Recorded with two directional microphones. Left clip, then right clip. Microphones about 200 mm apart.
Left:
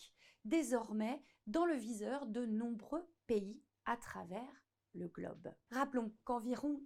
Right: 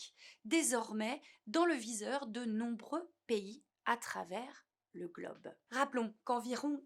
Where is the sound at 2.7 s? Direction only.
40° left (ahead or behind).